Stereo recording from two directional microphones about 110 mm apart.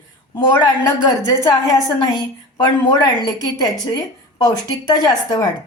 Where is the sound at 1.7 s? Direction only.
35° left (ahead or behind).